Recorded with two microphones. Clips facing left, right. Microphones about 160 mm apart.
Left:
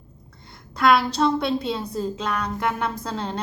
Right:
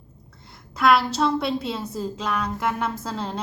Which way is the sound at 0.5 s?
Centre (ahead or behind).